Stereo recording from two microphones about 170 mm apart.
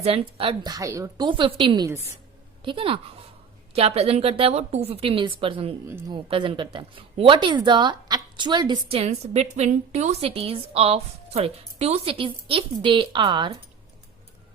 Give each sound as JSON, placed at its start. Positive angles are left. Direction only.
{"t": 0.0, "sound": "a woman's voice", "side_deg": -35}
{"t": 5.8, "sound": "speech", "side_deg": -15}
{"t": 6.2, "sound": "speech", "side_deg": -30}
{"t": 9.0, "sound": "a woman's voice", "side_deg": -40}